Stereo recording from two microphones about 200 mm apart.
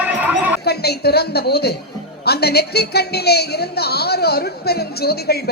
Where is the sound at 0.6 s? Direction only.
55° left (ahead or behind).